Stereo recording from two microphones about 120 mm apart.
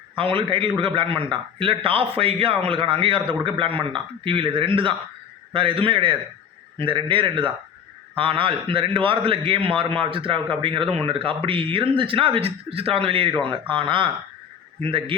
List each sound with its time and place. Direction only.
0.2 s a man's voice: 45° right (ahead or behind)